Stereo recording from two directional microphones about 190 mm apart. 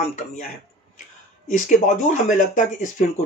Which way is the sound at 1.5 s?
40° left (ahead or behind).